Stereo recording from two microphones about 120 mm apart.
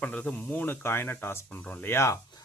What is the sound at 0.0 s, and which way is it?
Speech, 10° left (ahead or behind).